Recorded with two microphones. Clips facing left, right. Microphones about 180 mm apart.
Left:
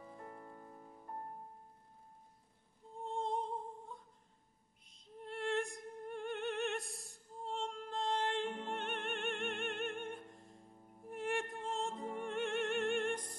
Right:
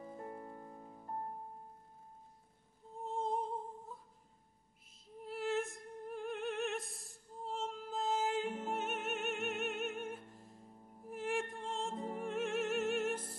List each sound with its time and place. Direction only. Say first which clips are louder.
0.2 s music: right 5 dB; 25° right (ahead or behind)
3.0 s music: right 1 dB; 5° right (ahead or behind)
5.0 s music: right 1 dB; 5° right (ahead or behind)